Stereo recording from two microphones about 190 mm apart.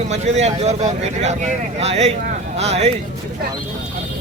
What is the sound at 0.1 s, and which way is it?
Speech, 35° right (ahead or behind).